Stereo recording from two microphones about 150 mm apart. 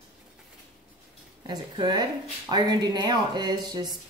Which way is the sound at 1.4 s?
30° right (ahead or behind).